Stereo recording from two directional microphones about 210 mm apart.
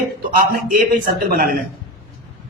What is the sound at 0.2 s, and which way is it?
A man's voice, 40° right (ahead or behind).